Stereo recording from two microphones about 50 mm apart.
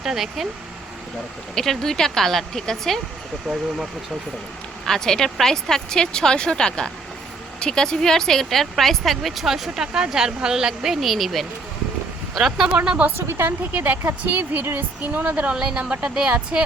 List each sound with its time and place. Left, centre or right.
0.0 s speech: centre
1.5 s speech: centre
4.9 s speech: centre
12.8 s speech: right
13.1 s speech: right
13.7 s speech: right
14.0 s speech: right
15.3 s speech: right